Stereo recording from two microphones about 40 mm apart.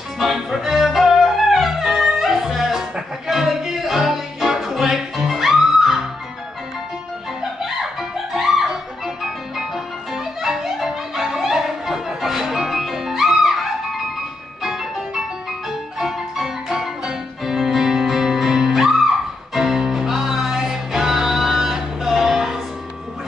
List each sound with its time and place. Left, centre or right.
0.2 s music: centre
7.6 s music: centre